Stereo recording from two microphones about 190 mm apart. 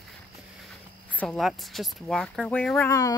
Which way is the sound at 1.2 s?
Centre (ahead or behind).